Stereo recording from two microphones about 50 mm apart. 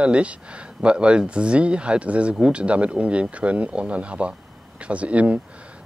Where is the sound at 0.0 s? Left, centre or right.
Right.